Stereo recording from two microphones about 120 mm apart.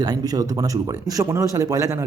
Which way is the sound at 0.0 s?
30° right (ahead or behind).